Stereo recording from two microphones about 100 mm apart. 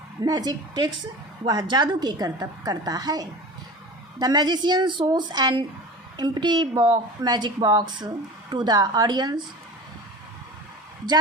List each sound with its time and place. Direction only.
0.3 s a woman's voice: 40° right (ahead or behind)